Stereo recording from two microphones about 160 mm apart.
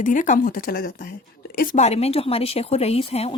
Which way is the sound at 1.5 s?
45° left (ahead or behind).